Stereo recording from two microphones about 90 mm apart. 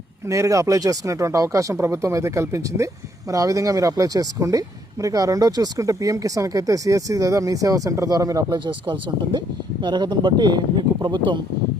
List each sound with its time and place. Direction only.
0.3 s speech: 35° right (ahead or behind)
8.5 s speech: 60° right (ahead or behind)